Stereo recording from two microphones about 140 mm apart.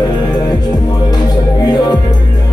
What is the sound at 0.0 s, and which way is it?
Music, 30° left (ahead or behind).